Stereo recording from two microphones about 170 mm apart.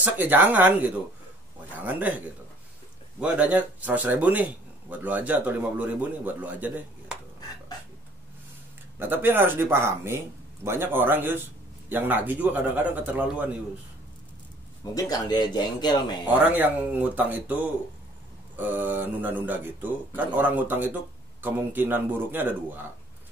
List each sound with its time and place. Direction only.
0.0 s a man's voice: 10° right (ahead or behind)
9.0 s a man's voice: 10° right (ahead or behind)
14.8 s speech: 20° left (ahead or behind)
16.3 s a man's voice: 10° right (ahead or behind)
18.6 s a man's voice: 10° right (ahead or behind)